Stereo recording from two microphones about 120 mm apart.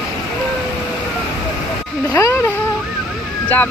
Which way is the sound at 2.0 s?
25° left (ahead or behind).